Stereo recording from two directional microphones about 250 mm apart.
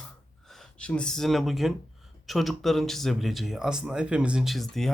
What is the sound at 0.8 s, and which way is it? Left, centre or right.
Speech, centre.